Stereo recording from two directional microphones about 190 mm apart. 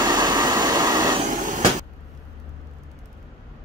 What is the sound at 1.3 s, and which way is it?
Vehicle, 45° right (ahead or behind).